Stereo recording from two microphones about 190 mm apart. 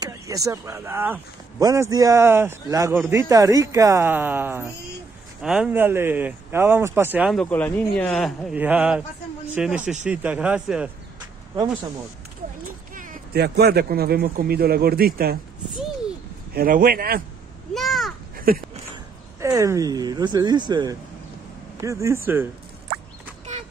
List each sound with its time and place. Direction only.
0.0 s speech: 20° right (ahead or behind)
12.9 s speech: 45° right (ahead or behind)
16.5 s speech: 50° right (ahead or behind)
17.7 s crow: centre (ahead or behind)
18.3 s a sound: 50° right (ahead or behind)
19.4 s speech: 15° right (ahead or behind)